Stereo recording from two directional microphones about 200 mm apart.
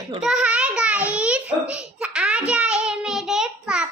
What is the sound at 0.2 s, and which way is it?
Babbling, 5° right (ahead or behind).